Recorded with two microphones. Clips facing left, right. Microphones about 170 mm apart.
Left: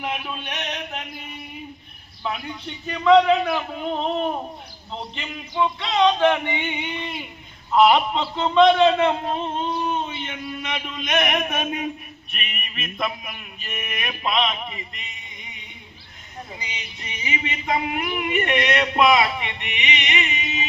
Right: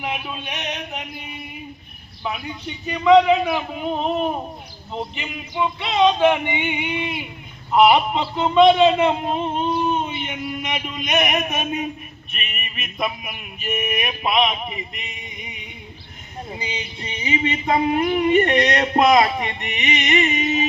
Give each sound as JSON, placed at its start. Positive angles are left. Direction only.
{"t": 0.0, "sound": "a sound", "side_deg": -5}
{"t": 2.2, "sound": "a man's voice", "side_deg": -5}
{"t": 16.5, "sound": "male singing", "side_deg": -30}